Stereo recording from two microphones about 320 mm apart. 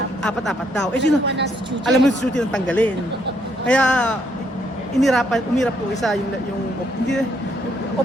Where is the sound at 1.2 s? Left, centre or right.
Right.